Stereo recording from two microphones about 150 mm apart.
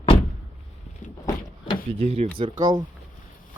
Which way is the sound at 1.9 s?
45° right (ahead or behind).